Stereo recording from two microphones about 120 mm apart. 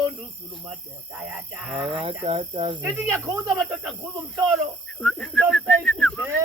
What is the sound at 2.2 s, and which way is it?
Speech, 45° right (ahead or behind).